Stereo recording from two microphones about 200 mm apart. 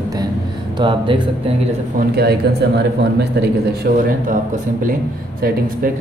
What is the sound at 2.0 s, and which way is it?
A man's voice, 55° right (ahead or behind).